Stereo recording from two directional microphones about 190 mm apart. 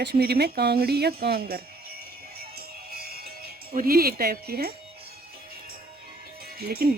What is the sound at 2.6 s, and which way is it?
Music, 55° right (ahead or behind).